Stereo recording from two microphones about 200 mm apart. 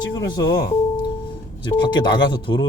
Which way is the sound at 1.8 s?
20° left (ahead or behind).